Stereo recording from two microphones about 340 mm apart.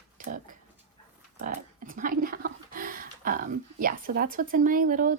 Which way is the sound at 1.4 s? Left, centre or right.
Right.